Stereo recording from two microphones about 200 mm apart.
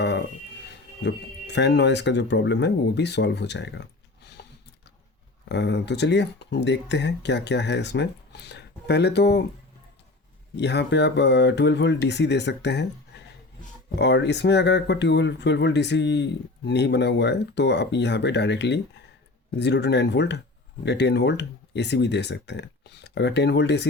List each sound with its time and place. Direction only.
0.0 s a sound: 60° left (ahead or behind)
1.0 s speech: 60° left (ahead or behind)
5.5 s speech: 60° left (ahead or behind)
10.5 s speech: 60° left (ahead or behind)
14.0 s speech: 60° left (ahead or behind)